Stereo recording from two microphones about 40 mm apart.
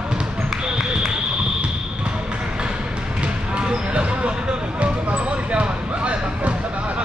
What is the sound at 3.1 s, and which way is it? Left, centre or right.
Basketball bounce, right.